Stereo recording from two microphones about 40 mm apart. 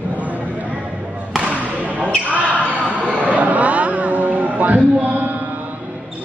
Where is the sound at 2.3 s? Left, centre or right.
Right.